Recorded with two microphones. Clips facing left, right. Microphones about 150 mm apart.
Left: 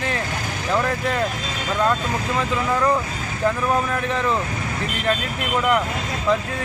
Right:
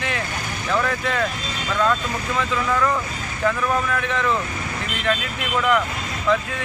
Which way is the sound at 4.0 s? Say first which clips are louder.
Left 1 dB; 35° left (ahead or behind).